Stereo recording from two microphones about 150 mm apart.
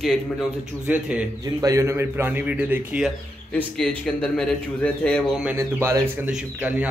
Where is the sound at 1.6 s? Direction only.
20° right (ahead or behind).